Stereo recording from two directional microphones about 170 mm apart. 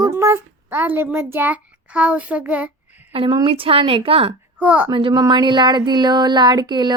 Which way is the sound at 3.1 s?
25° right (ahead or behind).